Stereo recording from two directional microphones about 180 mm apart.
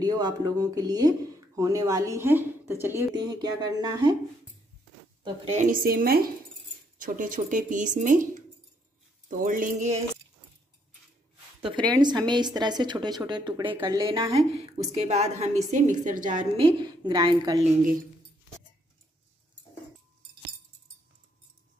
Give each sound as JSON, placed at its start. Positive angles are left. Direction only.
{"t": 0.0, "sound": "speech", "side_deg": -20}
{"t": 5.6, "sound": "speech", "side_deg": -50}
{"t": 11.6, "sound": "speech", "side_deg": -25}
{"t": 14.0, "sound": "a woman's voice", "side_deg": -30}
{"t": 16.5, "sound": "speech", "side_deg": -25}